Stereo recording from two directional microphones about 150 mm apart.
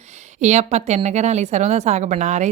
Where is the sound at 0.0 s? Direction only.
50° right (ahead or behind).